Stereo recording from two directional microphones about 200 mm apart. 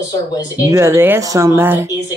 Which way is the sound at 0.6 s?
15° right (ahead or behind).